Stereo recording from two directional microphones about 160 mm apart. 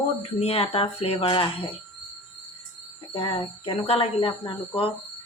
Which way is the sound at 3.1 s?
35° left (ahead or behind).